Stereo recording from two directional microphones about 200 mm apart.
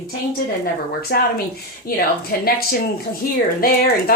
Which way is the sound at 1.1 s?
55° left (ahead or behind).